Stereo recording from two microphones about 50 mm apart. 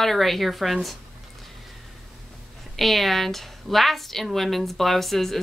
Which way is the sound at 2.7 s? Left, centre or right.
Centre.